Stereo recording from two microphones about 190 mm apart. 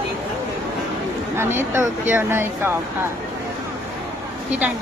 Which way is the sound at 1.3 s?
10° right (ahead or behind).